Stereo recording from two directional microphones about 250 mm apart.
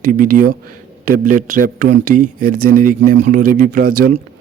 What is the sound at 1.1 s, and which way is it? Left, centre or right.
Speech, right.